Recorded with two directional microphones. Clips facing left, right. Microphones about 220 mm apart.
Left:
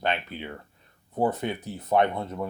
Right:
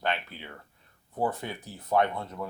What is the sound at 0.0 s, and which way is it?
Speech, 20° left (ahead or behind).